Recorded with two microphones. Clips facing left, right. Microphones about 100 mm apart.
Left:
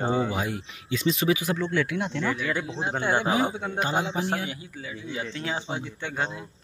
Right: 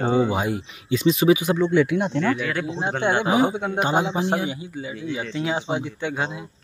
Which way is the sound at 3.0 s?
20° right (ahead or behind).